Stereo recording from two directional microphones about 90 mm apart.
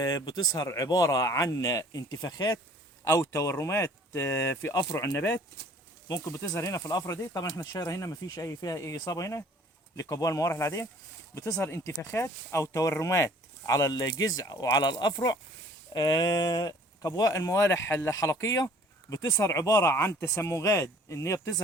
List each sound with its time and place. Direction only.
0.3 s speech: 45° left (ahead or behind)
3.2 s speech: 30° left (ahead or behind)